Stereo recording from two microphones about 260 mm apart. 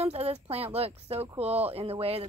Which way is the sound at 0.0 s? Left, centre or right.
Right.